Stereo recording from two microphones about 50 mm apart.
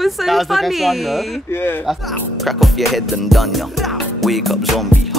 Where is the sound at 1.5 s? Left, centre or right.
Left.